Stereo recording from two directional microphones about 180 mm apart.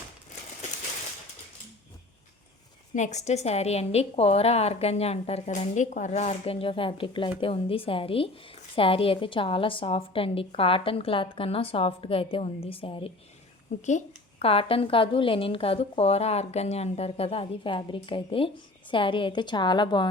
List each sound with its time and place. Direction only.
2.9 s a woman's voice: 40° left (ahead or behind); by 20.1 s 25° left (ahead or behind)